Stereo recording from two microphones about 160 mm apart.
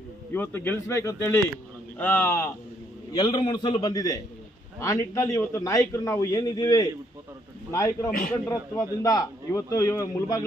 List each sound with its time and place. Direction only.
0.3 s speech: 10° left (ahead or behind)
3.1 s a man's voice: 30° left (ahead or behind)